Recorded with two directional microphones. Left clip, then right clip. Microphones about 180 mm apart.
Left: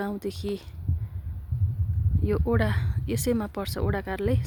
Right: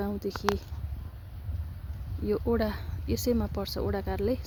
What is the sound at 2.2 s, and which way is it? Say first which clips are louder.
Speech: left 2 dB; 20° left (ahead or behind).